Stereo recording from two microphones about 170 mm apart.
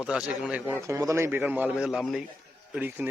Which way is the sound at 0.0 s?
5° right (ahead or behind).